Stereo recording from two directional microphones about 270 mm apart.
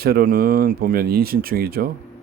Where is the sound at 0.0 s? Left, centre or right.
Right.